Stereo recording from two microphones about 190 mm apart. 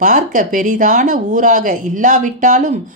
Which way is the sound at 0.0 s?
45° right (ahead or behind).